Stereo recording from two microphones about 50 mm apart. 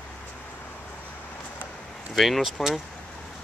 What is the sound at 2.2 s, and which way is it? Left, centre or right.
Speech, centre.